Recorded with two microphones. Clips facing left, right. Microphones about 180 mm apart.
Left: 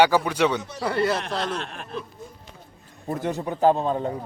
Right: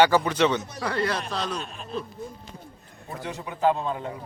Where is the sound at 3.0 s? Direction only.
45° left (ahead or behind).